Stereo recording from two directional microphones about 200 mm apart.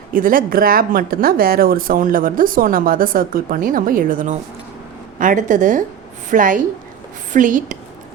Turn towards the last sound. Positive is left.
turn(degrees=-40)  # may be behind; listen again after turning